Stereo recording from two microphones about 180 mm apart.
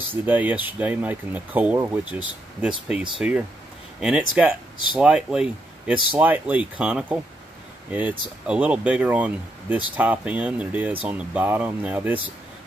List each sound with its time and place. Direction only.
0.1 s speech: 10° right (ahead or behind)